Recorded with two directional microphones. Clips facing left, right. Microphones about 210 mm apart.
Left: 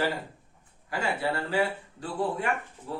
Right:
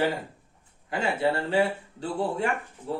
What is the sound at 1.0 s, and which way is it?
Speech, 25° right (ahead or behind).